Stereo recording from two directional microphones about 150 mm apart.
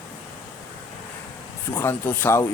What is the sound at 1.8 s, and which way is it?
Speech, 15° left (ahead or behind).